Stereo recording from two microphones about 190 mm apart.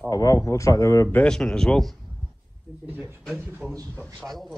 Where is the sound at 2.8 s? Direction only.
10° right (ahead or behind).